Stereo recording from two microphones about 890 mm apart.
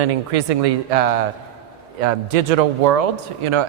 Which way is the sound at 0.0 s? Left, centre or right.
Right.